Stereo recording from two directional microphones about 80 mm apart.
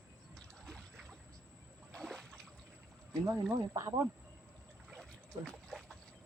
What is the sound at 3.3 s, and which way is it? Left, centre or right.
Speech, right.